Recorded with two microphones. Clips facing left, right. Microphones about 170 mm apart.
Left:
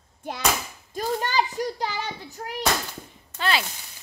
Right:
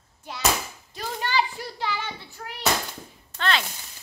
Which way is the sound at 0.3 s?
50° left (ahead or behind).